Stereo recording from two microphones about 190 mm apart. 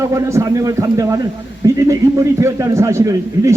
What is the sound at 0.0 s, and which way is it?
A man's voice, 15° right (ahead or behind).